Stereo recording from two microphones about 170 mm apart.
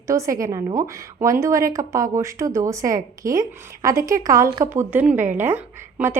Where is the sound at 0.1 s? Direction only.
20° right (ahead or behind).